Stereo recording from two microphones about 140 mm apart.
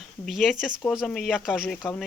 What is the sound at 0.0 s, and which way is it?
Speech, centre (ahead or behind).